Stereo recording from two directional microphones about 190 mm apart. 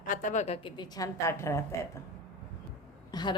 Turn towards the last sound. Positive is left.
turn(degrees=20)  # may be behind; listen again after turning